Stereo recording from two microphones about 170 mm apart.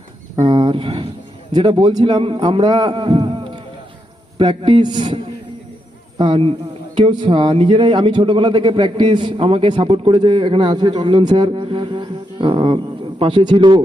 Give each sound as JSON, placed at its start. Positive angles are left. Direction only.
{"t": 0.3, "sound": "a man's voice", "side_deg": -30}